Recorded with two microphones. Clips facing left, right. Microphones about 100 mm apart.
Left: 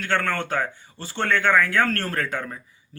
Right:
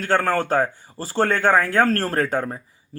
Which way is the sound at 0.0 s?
35° right (ahead or behind).